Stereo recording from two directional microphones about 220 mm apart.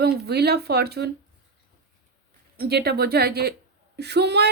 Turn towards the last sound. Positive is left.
turn(degrees=-50)  # may be behind; listen again after turning